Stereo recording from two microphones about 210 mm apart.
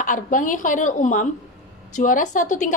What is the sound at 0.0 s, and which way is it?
A woman's voice, 40° left (ahead or behind).